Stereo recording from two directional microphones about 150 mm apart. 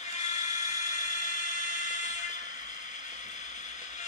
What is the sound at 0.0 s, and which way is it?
Fire alarm, 50° left (ahead or behind).